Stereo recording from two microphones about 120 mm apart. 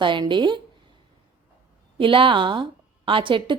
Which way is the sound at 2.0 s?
45° right (ahead or behind).